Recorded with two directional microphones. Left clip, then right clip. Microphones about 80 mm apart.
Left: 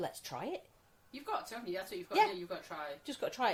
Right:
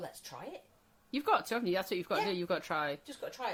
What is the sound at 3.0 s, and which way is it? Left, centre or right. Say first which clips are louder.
Speech: left 5 dB; left.